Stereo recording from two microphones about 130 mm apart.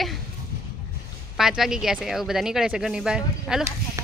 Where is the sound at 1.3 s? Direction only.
5° right (ahead or behind).